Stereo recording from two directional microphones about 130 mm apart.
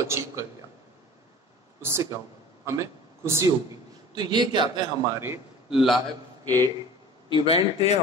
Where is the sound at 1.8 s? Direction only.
20° right (ahead or behind).